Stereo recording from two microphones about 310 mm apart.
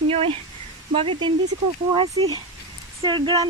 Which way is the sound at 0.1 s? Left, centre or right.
Centre.